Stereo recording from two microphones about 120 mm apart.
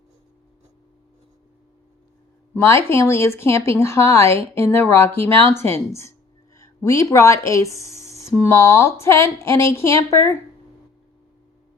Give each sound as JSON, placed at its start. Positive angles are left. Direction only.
{"t": 2.6, "sound": "speech", "side_deg": 20}